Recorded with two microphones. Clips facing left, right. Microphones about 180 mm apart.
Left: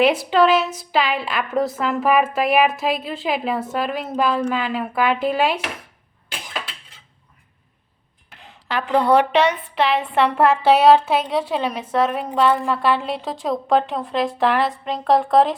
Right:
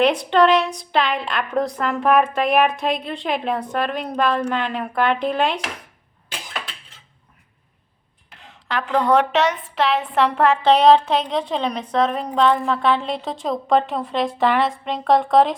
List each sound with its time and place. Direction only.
0.0 s a woman's voice: 5° left (ahead or behind)
8.6 s a woman's voice: 5° left (ahead or behind)